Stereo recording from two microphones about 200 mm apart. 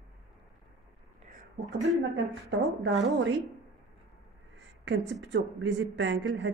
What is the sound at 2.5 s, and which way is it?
Speech, 65° right (ahead or behind).